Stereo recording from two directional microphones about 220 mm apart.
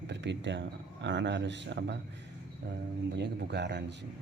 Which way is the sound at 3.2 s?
50° right (ahead or behind).